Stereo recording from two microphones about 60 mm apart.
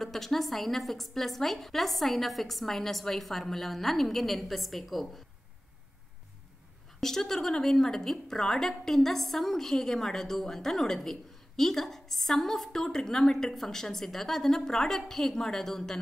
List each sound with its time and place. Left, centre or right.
0.0 s a woman's voice: centre
7.0 s a woman's voice: centre